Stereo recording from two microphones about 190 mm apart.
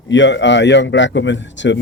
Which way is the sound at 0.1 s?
70° left (ahead or behind).